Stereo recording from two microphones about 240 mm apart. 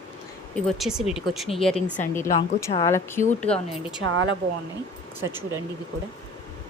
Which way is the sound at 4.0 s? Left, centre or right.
Right.